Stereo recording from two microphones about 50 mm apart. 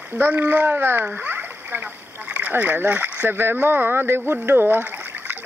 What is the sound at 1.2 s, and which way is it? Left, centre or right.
Splash, right.